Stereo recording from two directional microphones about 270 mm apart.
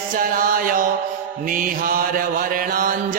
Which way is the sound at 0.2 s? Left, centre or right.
Right.